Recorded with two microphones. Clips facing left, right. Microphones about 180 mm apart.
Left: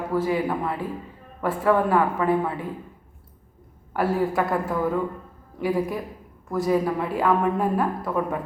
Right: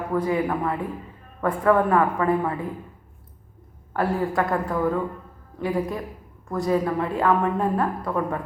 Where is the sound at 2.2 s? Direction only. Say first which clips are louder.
Even; 15° left (ahead or behind).